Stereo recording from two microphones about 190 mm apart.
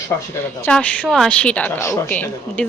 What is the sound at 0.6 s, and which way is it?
Speech, 10° left (ahead or behind).